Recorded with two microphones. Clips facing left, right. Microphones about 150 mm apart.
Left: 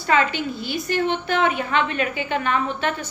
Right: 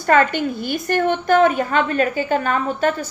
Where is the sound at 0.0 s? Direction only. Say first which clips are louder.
Right 4 dB; 50° right (ahead or behind).